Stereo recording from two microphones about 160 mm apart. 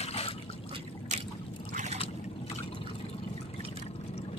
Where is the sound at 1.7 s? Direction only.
50° right (ahead or behind).